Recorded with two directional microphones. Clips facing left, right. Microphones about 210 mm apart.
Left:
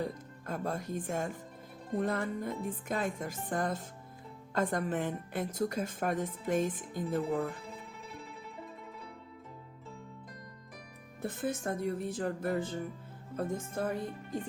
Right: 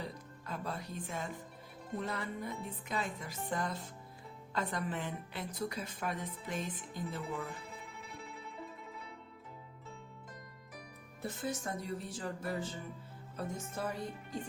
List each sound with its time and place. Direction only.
0.0 s music: 45° left (ahead or behind)
2.0 s a woman's voice: 50° left (ahead or behind)
11.2 s a woman's voice: 55° left (ahead or behind)